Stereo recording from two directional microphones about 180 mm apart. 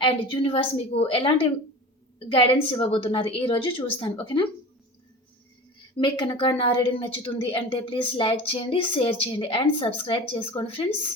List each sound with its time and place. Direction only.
0.0 s a woman's voice: 30° left (ahead or behind)
6.0 s a woman's voice: 25° left (ahead or behind)